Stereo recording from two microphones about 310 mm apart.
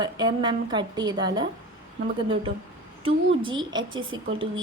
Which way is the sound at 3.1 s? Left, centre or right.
Centre.